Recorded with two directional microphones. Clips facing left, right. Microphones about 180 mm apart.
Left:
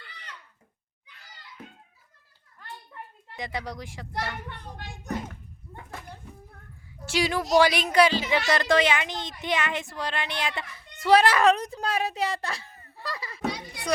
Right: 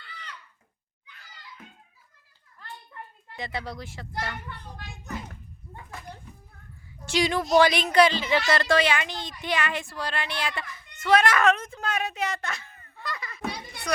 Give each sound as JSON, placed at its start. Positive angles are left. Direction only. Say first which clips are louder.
{"t": 3.3, "sound": "speech", "louder": "even", "side_deg": 15}
{"t": 7.0, "sound": "a woman's voice", "louder": "right 1 dB", "side_deg": 5}